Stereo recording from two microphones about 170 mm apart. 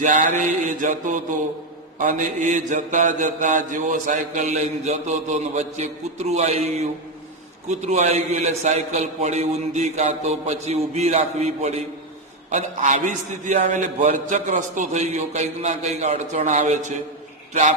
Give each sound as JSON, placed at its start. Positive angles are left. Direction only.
{"t": 0.0, "sound": "mantra", "side_deg": -50}
{"t": 7.7, "sound": "a man's voice", "side_deg": -40}
{"t": 12.5, "sound": "mantra", "side_deg": -45}
{"t": 17.5, "sound": "a man's voice", "side_deg": -45}